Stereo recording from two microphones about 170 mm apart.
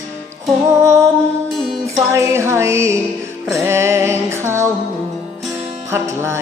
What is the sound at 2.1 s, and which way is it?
Music, 15° right (ahead or behind).